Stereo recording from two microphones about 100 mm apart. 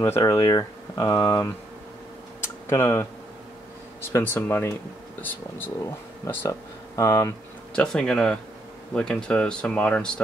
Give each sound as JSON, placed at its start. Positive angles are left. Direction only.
{"t": 0.2, "sound": "speech", "side_deg": 35}
{"t": 2.7, "sound": "speech", "side_deg": 25}
{"t": 4.2, "sound": "speech", "side_deg": 20}
{"t": 7.7, "sound": "speech", "side_deg": 5}